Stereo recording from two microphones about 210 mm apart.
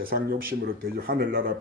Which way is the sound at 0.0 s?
45° right (ahead or behind).